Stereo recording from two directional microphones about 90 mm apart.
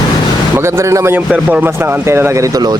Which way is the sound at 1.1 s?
15° right (ahead or behind).